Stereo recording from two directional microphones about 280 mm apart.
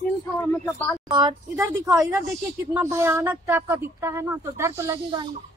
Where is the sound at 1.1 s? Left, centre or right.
Centre.